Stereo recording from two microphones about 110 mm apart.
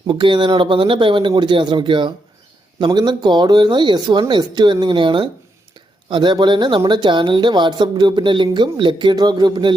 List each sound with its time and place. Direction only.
0.1 s speech: 50° right (ahead or behind)